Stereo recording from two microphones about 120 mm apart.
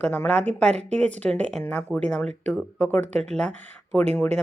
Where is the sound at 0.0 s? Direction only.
15° left (ahead or behind).